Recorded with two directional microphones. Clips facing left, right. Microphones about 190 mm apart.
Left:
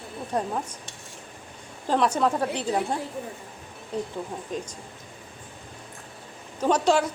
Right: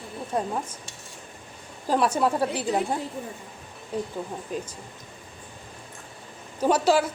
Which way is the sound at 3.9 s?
10° right (ahead or behind).